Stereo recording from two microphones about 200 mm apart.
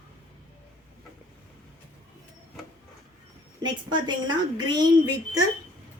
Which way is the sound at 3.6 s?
20° right (ahead or behind).